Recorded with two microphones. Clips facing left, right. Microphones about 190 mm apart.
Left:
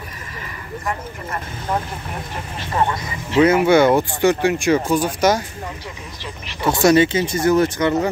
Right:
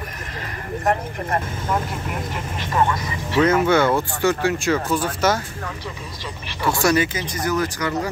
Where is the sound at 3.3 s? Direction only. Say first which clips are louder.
Left 4 dB; 10° left (ahead or behind).